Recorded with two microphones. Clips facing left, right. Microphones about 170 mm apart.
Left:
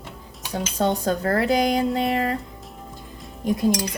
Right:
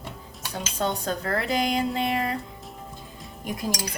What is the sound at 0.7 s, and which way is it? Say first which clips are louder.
Speech: left 5 dB; 40° left (ahead or behind).